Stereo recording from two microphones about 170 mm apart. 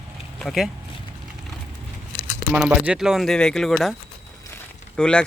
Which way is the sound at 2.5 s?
5° right (ahead or behind).